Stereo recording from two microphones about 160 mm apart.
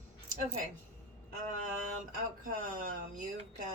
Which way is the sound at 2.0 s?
60° right (ahead or behind).